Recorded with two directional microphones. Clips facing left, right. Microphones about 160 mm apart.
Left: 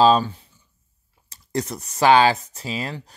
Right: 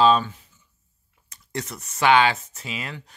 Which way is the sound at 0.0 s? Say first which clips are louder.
Left 2 dB; 35° left (ahead or behind).